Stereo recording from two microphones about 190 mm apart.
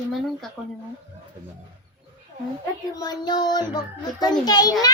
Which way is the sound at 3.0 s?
20° left (ahead or behind).